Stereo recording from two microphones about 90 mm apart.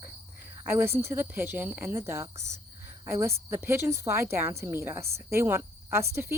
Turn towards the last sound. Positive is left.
turn(degrees=-30)  # may be behind; listen again after turning